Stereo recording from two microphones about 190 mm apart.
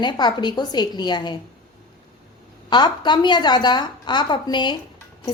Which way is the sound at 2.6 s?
25° left (ahead or behind).